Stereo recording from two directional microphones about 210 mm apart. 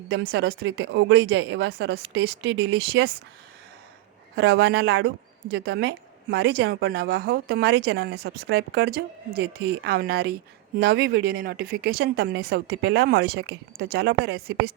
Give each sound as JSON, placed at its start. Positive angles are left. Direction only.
{"t": 0.1, "sound": "speech", "side_deg": -55}
{"t": 4.4, "sound": "speech", "side_deg": -50}